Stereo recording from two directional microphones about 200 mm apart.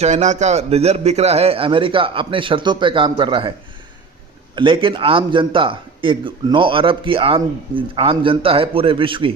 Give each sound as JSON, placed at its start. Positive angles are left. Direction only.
{"t": 0.0, "sound": "a man's voice", "side_deg": -35}
{"t": 4.5, "sound": "a man's voice", "side_deg": -25}